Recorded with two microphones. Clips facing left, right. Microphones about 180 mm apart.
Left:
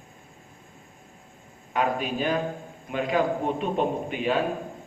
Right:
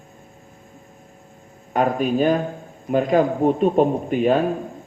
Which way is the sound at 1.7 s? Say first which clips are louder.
Right 7 dB; 45° right (ahead or behind).